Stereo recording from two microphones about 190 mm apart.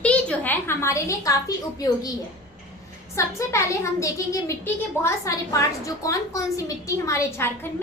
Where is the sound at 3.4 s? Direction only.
15° left (ahead or behind).